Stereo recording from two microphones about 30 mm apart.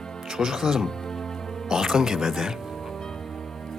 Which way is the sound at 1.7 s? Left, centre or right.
Centre.